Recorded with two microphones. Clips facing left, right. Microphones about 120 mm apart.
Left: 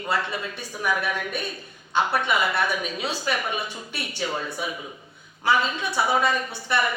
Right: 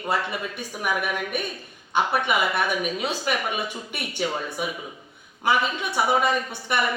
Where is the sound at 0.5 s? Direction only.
15° right (ahead or behind).